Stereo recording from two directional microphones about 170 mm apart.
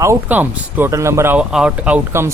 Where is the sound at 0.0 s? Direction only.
15° right (ahead or behind).